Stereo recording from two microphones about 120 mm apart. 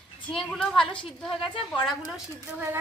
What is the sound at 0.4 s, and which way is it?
A woman's voice, 5° left (ahead or behind).